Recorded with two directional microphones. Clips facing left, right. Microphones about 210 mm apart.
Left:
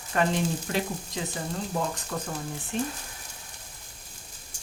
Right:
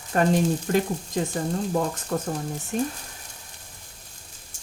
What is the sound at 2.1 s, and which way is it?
Speech, 40° right (ahead or behind).